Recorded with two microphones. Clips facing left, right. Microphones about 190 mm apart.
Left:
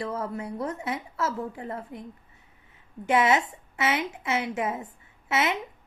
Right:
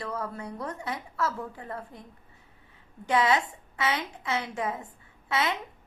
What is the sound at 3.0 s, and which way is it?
A woman's voice, 20° left (ahead or behind).